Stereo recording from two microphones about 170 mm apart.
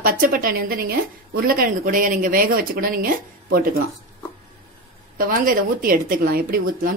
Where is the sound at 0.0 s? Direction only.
55° right (ahead or behind).